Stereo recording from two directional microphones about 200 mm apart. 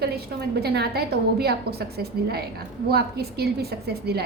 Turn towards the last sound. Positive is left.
turn(degrees=-55)  # may be behind; listen again after turning